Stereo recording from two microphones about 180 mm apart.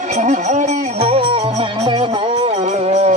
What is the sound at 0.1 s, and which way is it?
Music, 40° right (ahead or behind).